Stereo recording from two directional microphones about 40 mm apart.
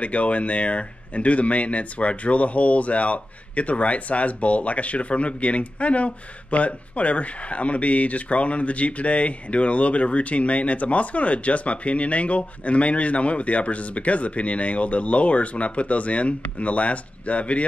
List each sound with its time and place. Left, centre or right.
0.0 s speech: left